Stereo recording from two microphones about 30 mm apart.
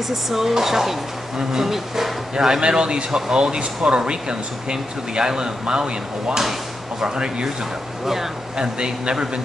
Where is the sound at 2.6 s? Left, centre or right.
Right.